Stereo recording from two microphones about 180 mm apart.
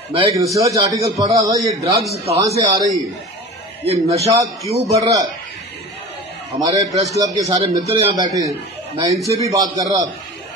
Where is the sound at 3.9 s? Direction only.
35° right (ahead or behind).